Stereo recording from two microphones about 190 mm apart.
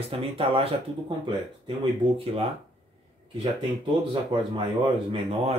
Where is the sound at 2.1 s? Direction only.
30° right (ahead or behind).